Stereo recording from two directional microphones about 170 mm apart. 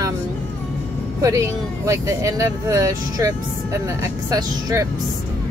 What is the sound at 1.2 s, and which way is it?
Speech, 20° right (ahead or behind).